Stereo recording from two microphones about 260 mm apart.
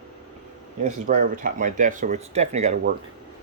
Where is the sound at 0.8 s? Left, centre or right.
Right.